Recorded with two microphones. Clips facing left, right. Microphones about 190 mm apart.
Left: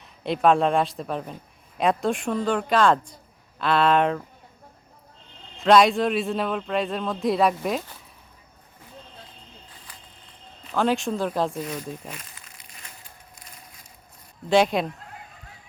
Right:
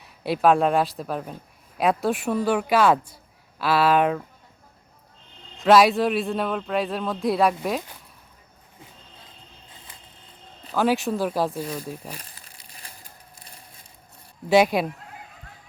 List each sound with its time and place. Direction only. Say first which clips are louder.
0.0 s a man's voice: right 1 dB; 5° right (ahead or behind)
5.5 s a man's voice: right 1 dB; 5° right (ahead or behind)
10.8 s a man's voice: right 1 dB; 5° right (ahead or behind)
11.6 s speech: right 1 dB; 35° right (ahead or behind)
12.0 s a sound: right 1 dB; 35° right (ahead or behind)
14.5 s speech: right 2 dB; 5° right (ahead or behind)